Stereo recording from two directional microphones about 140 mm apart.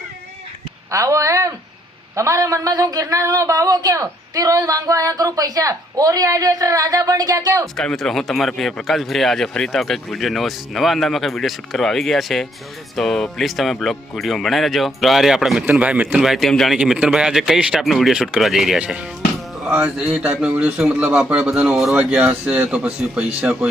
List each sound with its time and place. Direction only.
0.9 s speech: 20° right (ahead or behind)
7.8 s a man's voice: 5° left (ahead or behind)